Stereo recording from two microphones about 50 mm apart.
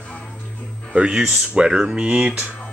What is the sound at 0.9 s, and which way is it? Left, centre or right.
Speech, right.